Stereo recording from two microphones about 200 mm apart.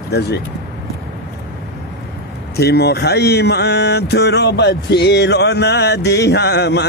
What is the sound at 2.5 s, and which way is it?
Speech, 55° left (ahead or behind).